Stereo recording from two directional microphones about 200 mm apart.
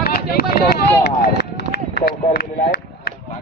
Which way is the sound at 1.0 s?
55° left (ahead or behind).